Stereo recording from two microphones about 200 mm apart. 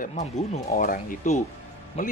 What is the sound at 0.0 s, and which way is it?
Speech, 35° left (ahead or behind).